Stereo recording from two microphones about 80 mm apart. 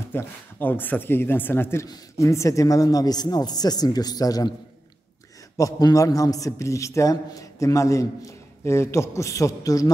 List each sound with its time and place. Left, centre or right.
0.1 s a man's voice: left
5.6 s a man's voice: left